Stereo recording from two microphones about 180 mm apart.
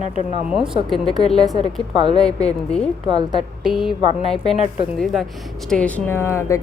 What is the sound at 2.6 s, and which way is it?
Speech, 5° left (ahead or behind).